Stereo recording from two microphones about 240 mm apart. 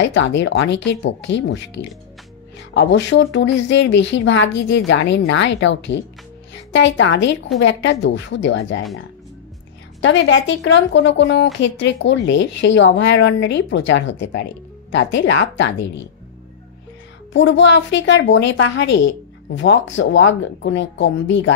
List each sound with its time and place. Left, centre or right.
0.0 s a woman's voice: left
10.0 s a woman's voice: left
17.3 s a woman's voice: left